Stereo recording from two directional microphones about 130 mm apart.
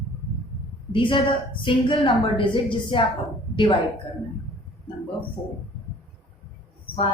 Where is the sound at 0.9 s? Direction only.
40° left (ahead or behind).